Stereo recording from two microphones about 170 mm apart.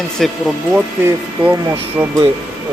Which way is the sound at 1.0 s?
15° right (ahead or behind).